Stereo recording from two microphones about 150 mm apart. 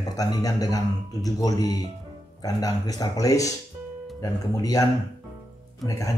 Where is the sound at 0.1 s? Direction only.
25° left (ahead or behind).